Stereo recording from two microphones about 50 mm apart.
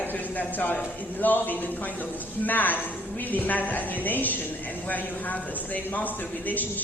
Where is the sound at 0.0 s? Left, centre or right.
Left.